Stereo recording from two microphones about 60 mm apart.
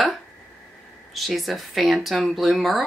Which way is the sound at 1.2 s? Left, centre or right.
Centre.